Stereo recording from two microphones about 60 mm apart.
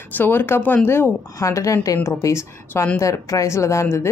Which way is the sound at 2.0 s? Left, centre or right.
Left.